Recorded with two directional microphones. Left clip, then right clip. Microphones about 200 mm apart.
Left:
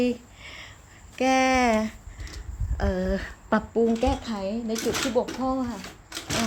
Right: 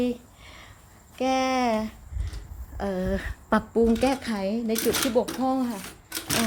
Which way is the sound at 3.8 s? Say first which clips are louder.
Right 1 dB; 20° right (ahead or behind).